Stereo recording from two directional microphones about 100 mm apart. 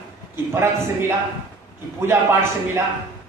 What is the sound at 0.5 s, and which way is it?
Male singing, 25° right (ahead or behind).